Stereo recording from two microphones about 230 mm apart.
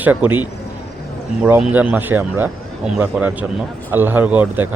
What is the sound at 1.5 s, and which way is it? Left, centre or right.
A man's voice, centre.